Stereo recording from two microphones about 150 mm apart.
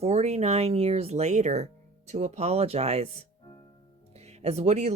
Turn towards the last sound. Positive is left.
turn(degrees=-50)  # may be behind; listen again after turning